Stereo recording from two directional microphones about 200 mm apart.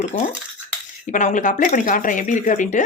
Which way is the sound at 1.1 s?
40° left (ahead or behind).